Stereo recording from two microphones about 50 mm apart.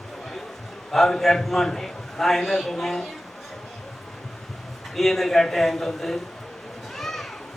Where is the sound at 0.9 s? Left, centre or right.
Centre.